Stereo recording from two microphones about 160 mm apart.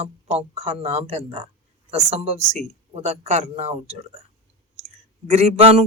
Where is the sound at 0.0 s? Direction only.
40° right (ahead or behind).